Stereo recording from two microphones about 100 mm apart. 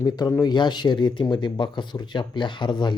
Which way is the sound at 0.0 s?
35° left (ahead or behind).